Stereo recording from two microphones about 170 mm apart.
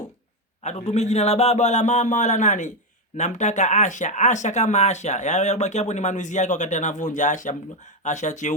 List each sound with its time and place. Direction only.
0.6 s speech: 40° left (ahead or behind)